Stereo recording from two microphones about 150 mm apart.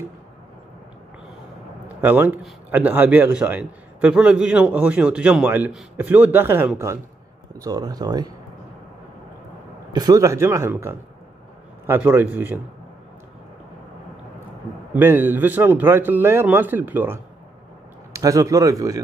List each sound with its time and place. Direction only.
2.0 s a man's voice: 15° right (ahead or behind)
9.9 s a man's voice: 25° right (ahead or behind)
15.0 s a man's voice: 15° right (ahead or behind)